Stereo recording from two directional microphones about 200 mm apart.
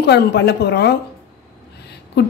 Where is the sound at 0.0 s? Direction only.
55° left (ahead or behind).